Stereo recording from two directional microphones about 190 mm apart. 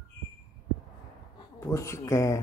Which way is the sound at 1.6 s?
15° left (ahead or behind).